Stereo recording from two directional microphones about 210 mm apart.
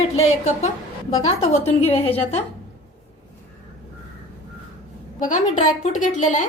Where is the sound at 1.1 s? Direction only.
30° left (ahead or behind).